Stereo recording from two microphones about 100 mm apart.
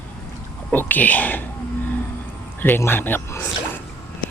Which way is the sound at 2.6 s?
20° left (ahead or behind).